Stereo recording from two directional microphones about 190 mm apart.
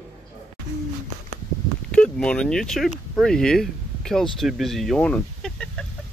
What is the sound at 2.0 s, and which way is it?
A woman's voice, 5° left (ahead or behind).